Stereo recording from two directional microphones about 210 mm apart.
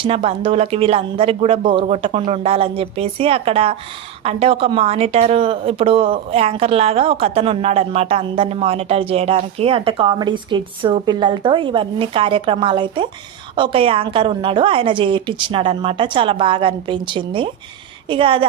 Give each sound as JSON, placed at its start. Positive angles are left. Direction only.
{"t": 0.0, "sound": "speech", "side_deg": -25}